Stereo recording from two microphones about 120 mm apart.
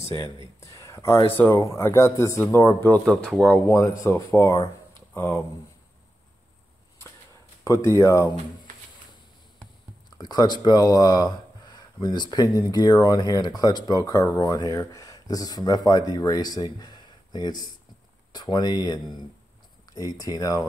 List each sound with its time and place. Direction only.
0.6 s a sound: 25° left (ahead or behind)
1.3 s speech: 15° left (ahead or behind)
3.1 s speech: 5° left (ahead or behind)
3.6 s speech: 25° left (ahead or behind)
7.6 s speech: 25° left (ahead or behind)
10.1 s speech: 35° left (ahead or behind)